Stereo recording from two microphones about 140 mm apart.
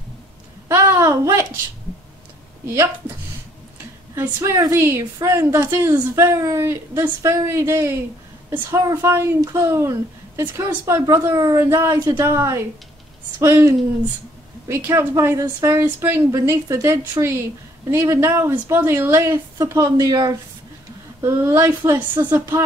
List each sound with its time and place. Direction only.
0.7 s speech: 20° right (ahead or behind)
2.6 s speech: 20° right (ahead or behind)
4.1 s a woman's voice: 20° right (ahead or behind)